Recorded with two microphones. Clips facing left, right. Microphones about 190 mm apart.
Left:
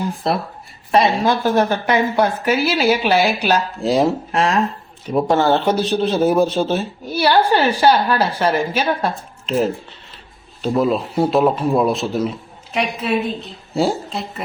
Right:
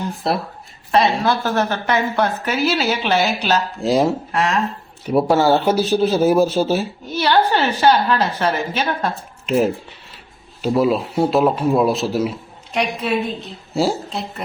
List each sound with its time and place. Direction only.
0.2 s speech: centre (ahead or behind)
0.9 s a woman's voice: 15° left (ahead or behind)
3.8 s speech: centre (ahead or behind)
4.3 s speech: 25° left (ahead or behind)
5.0 s speech: 10° right (ahead or behind)
7.1 s a woman's voice: 10° left (ahead or behind)
10.6 s speech: 5° right (ahead or behind)